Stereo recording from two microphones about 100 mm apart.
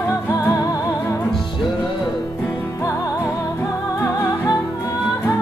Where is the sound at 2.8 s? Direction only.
35° left (ahead or behind).